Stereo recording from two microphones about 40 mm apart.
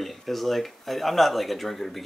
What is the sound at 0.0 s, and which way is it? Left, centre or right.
Speech, centre.